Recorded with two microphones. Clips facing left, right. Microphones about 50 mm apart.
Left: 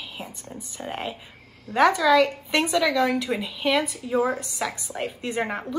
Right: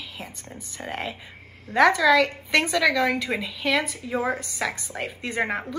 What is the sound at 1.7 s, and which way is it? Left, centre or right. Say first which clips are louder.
Speech: even; centre.